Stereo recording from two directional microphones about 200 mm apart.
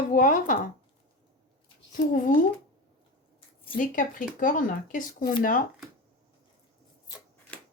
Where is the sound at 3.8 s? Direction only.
45° left (ahead or behind).